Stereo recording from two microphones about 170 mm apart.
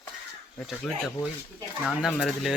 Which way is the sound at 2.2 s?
Centre (ahead or behind).